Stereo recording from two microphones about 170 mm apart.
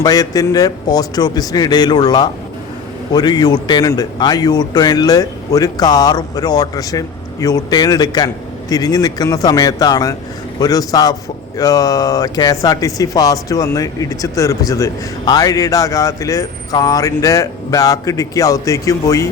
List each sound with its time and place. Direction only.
0.0 s speech: 20° left (ahead or behind)